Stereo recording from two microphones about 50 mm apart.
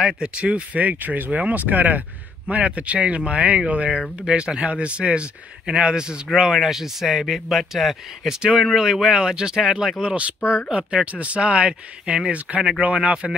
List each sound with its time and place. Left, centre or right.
0.0 s speech: centre; by 2.0 s right
2.4 s speech: right
6.5 s speech: centre; by 13.3 s right